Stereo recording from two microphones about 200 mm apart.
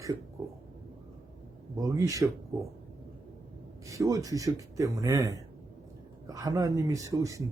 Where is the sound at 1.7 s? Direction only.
15° right (ahead or behind).